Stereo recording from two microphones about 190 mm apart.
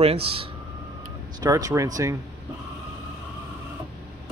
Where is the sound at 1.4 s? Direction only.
20° right (ahead or behind).